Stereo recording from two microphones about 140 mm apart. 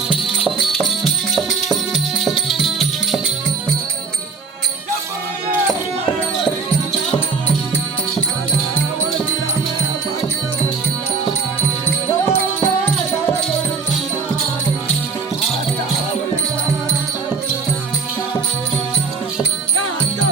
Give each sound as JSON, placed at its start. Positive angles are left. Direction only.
{"t": 0.4, "sound": "music", "side_deg": 0}
{"t": 12.3, "sound": "music", "side_deg": 15}